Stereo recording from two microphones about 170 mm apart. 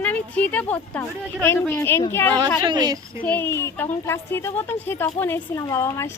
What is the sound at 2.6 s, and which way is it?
Speech, 25° right (ahead or behind).